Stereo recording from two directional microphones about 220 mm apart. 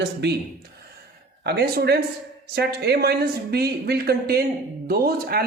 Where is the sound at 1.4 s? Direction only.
50° right (ahead or behind).